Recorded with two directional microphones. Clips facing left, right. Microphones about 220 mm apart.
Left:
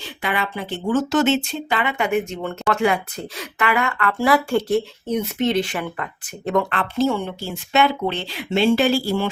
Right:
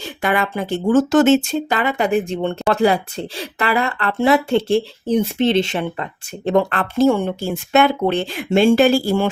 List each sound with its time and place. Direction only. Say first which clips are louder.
0.0 s speech: right 5 dB; 45° right (ahead or behind)